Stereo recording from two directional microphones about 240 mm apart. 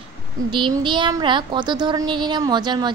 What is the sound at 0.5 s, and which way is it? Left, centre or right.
A woman's voice, centre.